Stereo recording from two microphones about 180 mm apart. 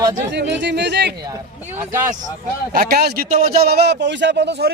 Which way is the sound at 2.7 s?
60° right (ahead or behind).